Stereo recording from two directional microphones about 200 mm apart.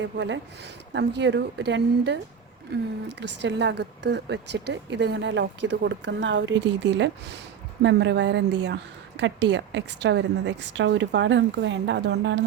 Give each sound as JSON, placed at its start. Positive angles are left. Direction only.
{"t": 0.0, "sound": "a woman's voice", "side_deg": -60}